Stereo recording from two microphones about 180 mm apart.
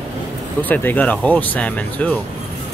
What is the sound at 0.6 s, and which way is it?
Speech, 10° left (ahead or behind).